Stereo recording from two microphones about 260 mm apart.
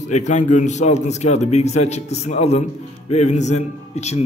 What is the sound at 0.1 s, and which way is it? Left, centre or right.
A man's voice, left.